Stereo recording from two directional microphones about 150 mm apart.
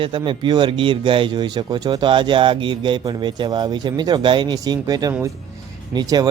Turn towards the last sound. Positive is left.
turn(degrees=-25)  # may be behind; listen again after turning